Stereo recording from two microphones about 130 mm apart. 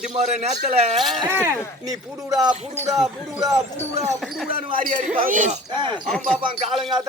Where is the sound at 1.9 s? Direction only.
25° right (ahead or behind).